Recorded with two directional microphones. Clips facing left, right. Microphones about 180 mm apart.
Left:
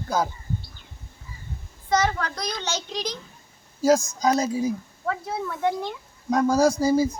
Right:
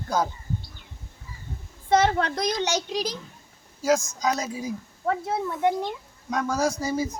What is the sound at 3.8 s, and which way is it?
Speech, 35° left (ahead or behind).